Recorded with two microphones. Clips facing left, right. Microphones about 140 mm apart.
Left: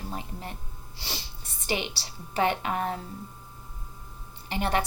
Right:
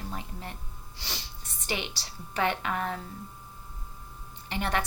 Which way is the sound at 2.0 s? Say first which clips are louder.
Left 3 dB; 30° left (ahead or behind).